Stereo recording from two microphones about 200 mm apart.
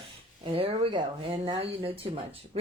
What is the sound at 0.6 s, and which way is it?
Speech, 25° right (ahead or behind).